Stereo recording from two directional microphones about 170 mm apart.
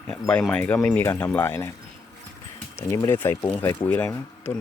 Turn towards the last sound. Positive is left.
turn(degrees=10)  # may be behind; listen again after turning